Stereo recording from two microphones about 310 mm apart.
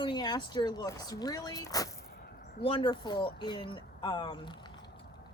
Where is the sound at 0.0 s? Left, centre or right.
Centre.